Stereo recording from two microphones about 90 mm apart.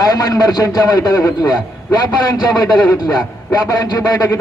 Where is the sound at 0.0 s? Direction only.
45° left (ahead or behind).